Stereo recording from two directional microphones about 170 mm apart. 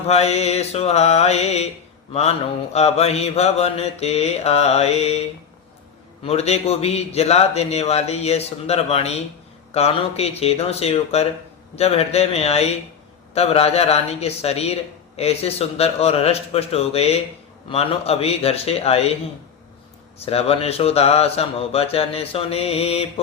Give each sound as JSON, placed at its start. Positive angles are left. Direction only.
{"t": 0.1, "sound": "a man's voice", "side_deg": 40}
{"t": 2.7, "sound": "a man's voice", "side_deg": 40}
{"t": 6.2, "sound": "a man's voice", "side_deg": 40}
{"t": 20.2, "sound": "a man's voice", "side_deg": 35}